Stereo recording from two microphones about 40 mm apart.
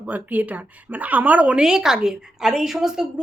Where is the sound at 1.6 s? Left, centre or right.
Centre.